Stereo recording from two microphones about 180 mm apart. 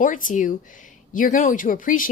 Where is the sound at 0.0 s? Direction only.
50° left (ahead or behind).